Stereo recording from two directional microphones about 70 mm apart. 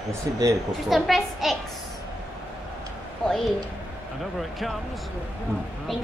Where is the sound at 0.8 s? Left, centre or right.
Centre.